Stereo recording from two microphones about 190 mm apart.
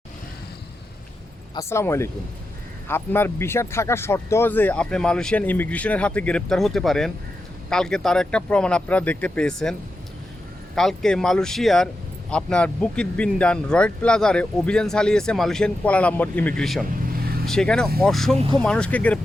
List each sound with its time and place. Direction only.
1.5 s speech: 15° left (ahead or behind)
10.8 s speech: centre (ahead or behind)
16.9 s vehicle: 50° right (ahead or behind)
17.4 s speech: 5° left (ahead or behind)